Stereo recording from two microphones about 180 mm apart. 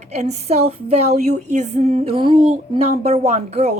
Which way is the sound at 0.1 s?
40° right (ahead or behind).